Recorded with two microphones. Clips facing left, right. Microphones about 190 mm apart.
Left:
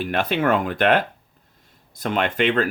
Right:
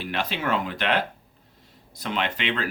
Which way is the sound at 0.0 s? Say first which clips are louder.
Left 7 dB; 50° left (ahead or behind).